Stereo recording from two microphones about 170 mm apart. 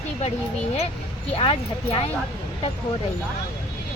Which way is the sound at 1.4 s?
30° left (ahead or behind).